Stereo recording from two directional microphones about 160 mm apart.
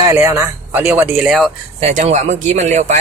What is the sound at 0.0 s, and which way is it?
Speech, 15° right (ahead or behind).